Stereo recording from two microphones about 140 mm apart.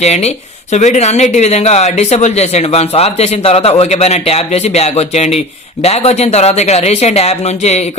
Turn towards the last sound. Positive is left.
turn(degrees=50)  # may be behind; listen again after turning